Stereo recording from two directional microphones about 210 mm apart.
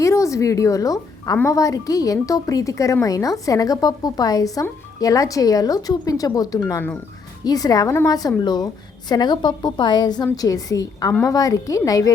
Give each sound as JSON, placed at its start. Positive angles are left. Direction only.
{"t": 0.0, "sound": "a woman's voice", "side_deg": 15}